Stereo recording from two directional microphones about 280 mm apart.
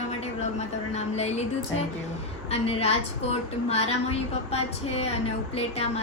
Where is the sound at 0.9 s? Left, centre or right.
Left.